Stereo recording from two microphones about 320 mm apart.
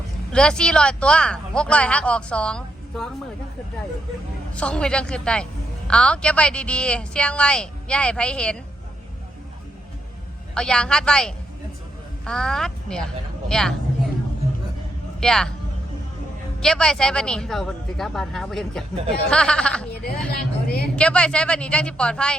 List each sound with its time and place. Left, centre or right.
0.3 s speech: centre
4.5 s speech: centre
10.5 s speech: centre
15.2 s speech: centre
16.6 s speech: centre
20.3 s a woman's voice: left
20.9 s speech: centre